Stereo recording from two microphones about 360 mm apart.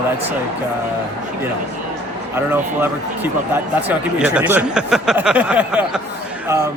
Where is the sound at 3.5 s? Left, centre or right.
Centre.